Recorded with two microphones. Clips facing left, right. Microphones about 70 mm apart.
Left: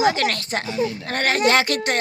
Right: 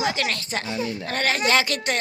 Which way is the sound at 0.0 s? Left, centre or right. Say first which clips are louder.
Left 5 dB; left.